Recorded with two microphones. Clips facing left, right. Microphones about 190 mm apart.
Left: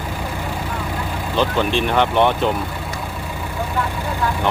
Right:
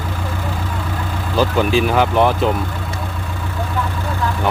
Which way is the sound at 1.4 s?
5° right (ahead or behind).